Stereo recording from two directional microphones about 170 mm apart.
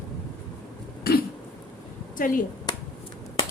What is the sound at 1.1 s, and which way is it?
Cough, 65° left (ahead or behind).